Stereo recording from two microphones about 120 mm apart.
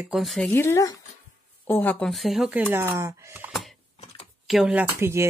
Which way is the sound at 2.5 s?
15° right (ahead or behind).